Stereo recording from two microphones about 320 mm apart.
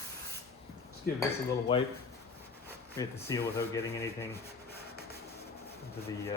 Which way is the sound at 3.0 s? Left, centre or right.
Centre.